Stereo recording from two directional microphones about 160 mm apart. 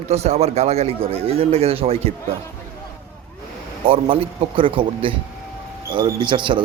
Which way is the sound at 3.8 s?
35° right (ahead or behind).